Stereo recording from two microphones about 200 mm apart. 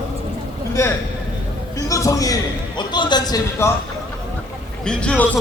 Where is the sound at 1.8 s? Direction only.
15° left (ahead or behind).